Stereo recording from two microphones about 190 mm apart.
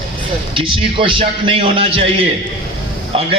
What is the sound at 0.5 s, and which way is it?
A man's voice, 25° right (ahead or behind).